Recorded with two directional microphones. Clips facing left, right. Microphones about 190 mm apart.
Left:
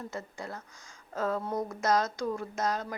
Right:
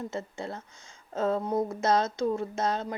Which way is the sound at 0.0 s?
25° right (ahead or behind).